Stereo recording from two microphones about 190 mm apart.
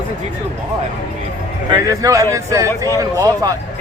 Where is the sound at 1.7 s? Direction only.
20° right (ahead or behind).